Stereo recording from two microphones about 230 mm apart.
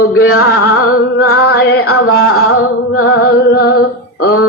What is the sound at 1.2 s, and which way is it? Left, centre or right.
Music, left.